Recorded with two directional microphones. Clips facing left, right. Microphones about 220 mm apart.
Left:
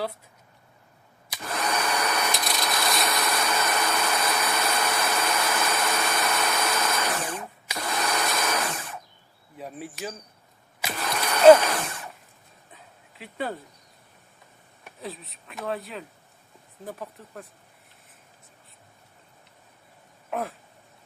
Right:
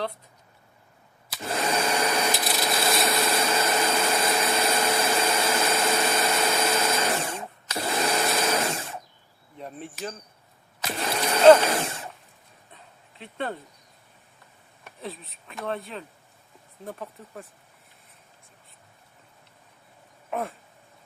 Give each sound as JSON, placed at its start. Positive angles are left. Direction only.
{"t": 1.5, "sound": "vacuum cleaner", "side_deg": -25}
{"t": 2.3, "sound": "wood", "side_deg": -5}
{"t": 2.6, "sound": "wood", "side_deg": -25}
{"t": 3.1, "sound": "vacuum cleaner", "side_deg": -25}
{"t": 7.8, "sound": "sewing machine", "side_deg": -25}
{"t": 9.6, "sound": "speech", "side_deg": 5}
{"t": 10.9, "sound": "a sound", "side_deg": -25}
{"t": 12.7, "sound": "dog", "side_deg": 5}
{"t": 14.8, "sound": "speech", "side_deg": 0}
{"t": 20.3, "sound": "a sound", "side_deg": 0}